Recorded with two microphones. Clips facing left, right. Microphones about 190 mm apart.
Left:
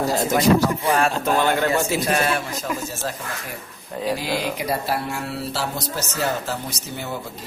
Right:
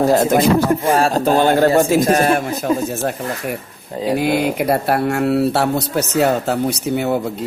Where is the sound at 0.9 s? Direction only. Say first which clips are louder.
Right 5 dB; 35° right (ahead or behind).